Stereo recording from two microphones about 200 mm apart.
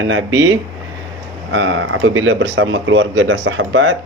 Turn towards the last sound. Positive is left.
turn(degrees=-70)  # may be behind; listen again after turning